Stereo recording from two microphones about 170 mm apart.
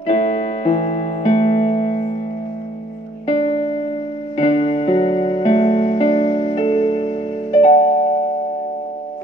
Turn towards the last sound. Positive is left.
turn(degrees=35)  # may be behind; listen again after turning